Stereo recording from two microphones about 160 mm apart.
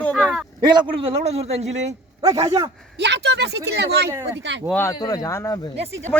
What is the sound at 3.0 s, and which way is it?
Speech, 90° right.